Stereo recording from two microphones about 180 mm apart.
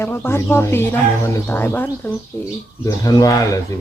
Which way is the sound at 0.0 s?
10° left (ahead or behind).